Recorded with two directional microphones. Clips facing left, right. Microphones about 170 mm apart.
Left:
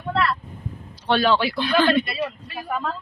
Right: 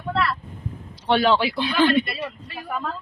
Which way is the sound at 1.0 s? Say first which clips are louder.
Right 1 dB; 15° right (ahead or behind).